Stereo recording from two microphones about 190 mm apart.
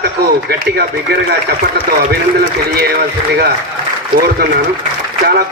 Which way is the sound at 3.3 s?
55° right (ahead or behind).